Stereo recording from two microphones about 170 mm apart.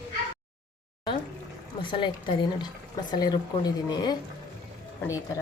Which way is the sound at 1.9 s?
30° left (ahead or behind).